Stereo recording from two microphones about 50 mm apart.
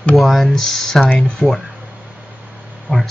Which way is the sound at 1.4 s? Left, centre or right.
Centre.